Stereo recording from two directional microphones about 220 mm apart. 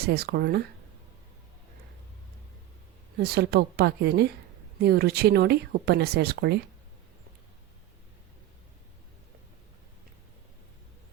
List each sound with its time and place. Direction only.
0.0 s speech: 45° right (ahead or behind)
3.2 s speech: 45° right (ahead or behind)